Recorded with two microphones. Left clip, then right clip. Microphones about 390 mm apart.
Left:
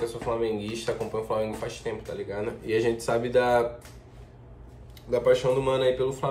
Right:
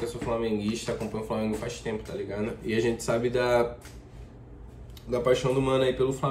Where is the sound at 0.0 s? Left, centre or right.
Centre.